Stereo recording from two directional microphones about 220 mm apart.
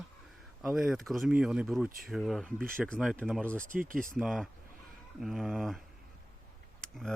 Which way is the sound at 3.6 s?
35° right (ahead or behind).